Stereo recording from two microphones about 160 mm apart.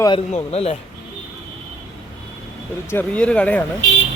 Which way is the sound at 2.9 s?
10° left (ahead or behind).